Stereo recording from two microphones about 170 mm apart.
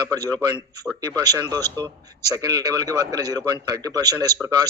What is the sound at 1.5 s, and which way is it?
Speech, 25° right (ahead or behind).